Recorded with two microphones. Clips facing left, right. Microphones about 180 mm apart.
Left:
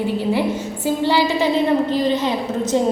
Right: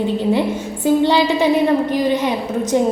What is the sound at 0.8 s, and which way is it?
A woman's voice, 20° right (ahead or behind).